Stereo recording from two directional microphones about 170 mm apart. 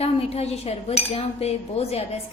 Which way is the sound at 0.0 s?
35° left (ahead or behind).